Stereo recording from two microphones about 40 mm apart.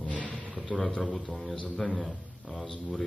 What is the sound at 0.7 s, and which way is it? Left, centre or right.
A man's voice, left.